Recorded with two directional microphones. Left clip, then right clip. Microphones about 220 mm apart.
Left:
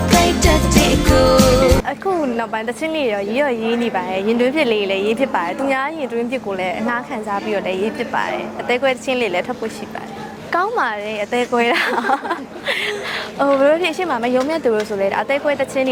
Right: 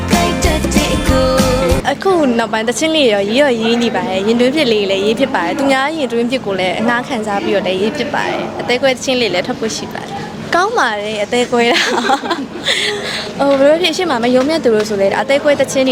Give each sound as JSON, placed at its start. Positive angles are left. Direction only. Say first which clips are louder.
{"t": 0.1, "sound": "music", "louder": "even", "side_deg": 0}
{"t": 3.7, "sound": "speech", "louder": "right 4 dB", "side_deg": 15}
{"t": 10.5, "sound": "speech", "louder": "right 5 dB", "side_deg": 0}
{"t": 14.0, "sound": "speech", "louder": "right 5 dB", "side_deg": 0}